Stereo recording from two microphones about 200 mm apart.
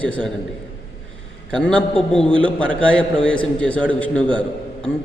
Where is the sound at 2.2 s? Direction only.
25° right (ahead or behind).